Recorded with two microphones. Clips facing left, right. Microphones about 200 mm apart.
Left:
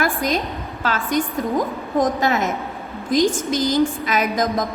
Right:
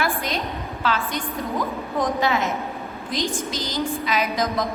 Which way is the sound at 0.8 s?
45° left (ahead or behind).